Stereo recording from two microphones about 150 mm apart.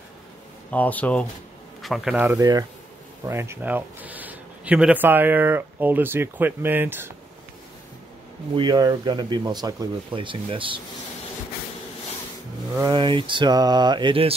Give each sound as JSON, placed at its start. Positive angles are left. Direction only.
{"t": 0.7, "sound": "speech", "side_deg": 10}
{"t": 2.1, "sound": "speech", "side_deg": -15}
{"t": 8.5, "sound": "speech", "side_deg": -25}
{"t": 12.9, "sound": "mantra", "side_deg": -35}